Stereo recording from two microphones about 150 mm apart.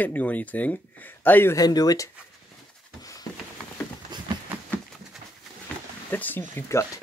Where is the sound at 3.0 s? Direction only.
25° left (ahead or behind).